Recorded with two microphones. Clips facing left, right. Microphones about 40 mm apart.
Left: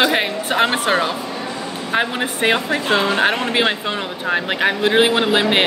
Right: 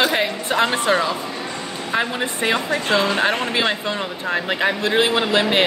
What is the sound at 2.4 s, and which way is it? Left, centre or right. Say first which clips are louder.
Speech: left 3 dB; left.